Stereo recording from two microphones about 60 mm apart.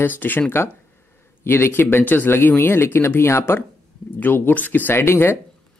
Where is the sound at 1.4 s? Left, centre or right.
Left.